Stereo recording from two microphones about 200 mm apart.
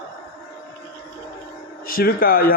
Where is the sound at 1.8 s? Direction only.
50° left (ahead or behind).